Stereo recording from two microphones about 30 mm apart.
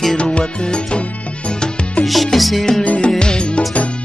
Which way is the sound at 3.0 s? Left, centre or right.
Left.